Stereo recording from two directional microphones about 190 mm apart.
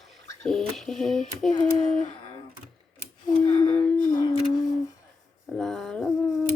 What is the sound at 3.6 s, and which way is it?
Humming, 5° left (ahead or behind).